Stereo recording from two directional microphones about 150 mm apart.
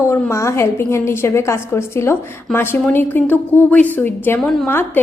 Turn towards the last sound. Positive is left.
turn(degrees=15)  # may be behind; listen again after turning